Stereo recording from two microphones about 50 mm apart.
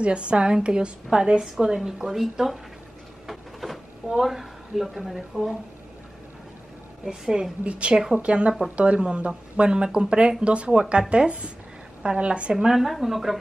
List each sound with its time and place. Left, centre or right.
0.0 s a woman's voice: right; by 2.6 s centre
3.3 s a sound: centre
7.1 s a woman's voice: centre
12.5 s speech: centre